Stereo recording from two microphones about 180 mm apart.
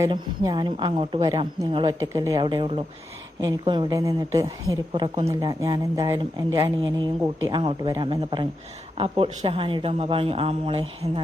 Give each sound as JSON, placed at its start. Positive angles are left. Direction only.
{"t": 0.0, "sound": "a woman's voice", "side_deg": -20}